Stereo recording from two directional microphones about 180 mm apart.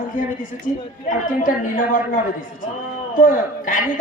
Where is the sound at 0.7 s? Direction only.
45° left (ahead or behind).